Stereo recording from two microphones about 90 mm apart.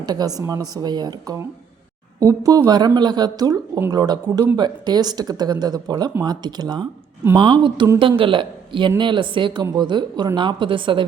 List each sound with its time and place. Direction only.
0.0 s speech: 50° right (ahead or behind)
2.2 s speech: 35° right (ahead or behind); by 7.9 s 60° right (ahead or behind)
7.9 s speech: 75° right (ahead or behind)